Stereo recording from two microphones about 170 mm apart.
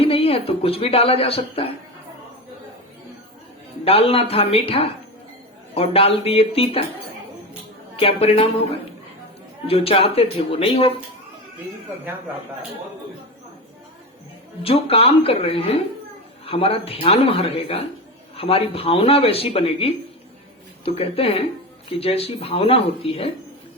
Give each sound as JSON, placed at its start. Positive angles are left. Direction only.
{"t": 0.0, "sound": "speech", "side_deg": 35}
{"t": 3.8, "sound": "speech", "side_deg": 35}
{"t": 7.9, "sound": "speech", "side_deg": 35}
{"t": 9.6, "sound": "speech", "side_deg": 35}
{"t": 14.6, "sound": "speech", "side_deg": 35}